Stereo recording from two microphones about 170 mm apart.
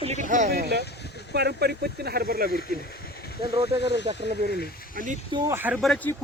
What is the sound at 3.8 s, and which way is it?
Speech, 90° left.